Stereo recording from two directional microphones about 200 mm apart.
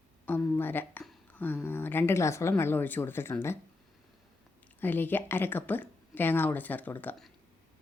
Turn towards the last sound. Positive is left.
turn(degrees=10)  # may be behind; listen again after turning